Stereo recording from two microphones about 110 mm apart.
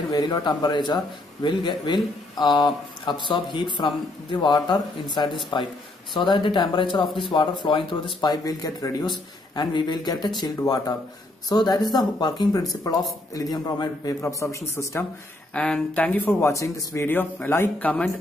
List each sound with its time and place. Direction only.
0.1 s a man's voice: 40° left (ahead or behind); by 15.0 s 25° left (ahead or behind)
15.5 s speech: 10° left (ahead or behind)